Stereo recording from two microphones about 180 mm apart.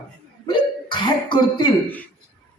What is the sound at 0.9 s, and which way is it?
Speech, 25° left (ahead or behind).